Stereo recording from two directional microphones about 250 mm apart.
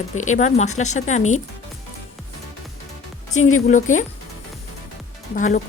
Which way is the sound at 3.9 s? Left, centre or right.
Left.